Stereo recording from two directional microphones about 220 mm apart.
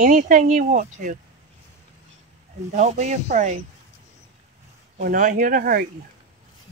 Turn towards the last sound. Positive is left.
turn(degrees=-40)  # may be behind; listen again after turning